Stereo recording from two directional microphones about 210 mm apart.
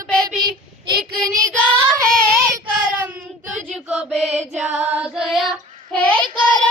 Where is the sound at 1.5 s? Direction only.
5° left (ahead or behind).